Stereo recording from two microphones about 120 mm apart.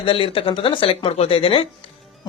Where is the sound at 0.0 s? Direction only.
50° left (ahead or behind).